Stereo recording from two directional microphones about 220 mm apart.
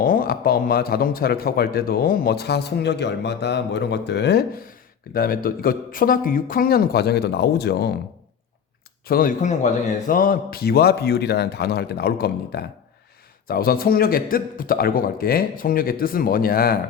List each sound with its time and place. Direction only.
0.0 s speech: 40° left (ahead or behind)
9.0 s a man's voice: 40° left (ahead or behind)